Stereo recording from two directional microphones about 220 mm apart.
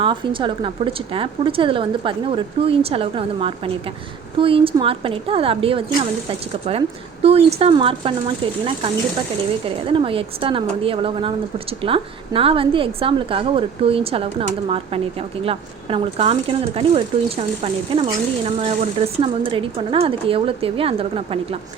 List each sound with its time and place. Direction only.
0.0 s speech: 20° right (ahead or behind)
9.6 s speech: 25° right (ahead or behind)